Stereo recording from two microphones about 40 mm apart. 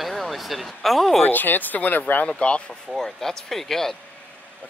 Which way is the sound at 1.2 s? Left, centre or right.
Left.